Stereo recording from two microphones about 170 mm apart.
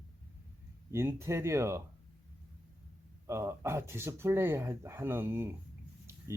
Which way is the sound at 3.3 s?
15° right (ahead or behind).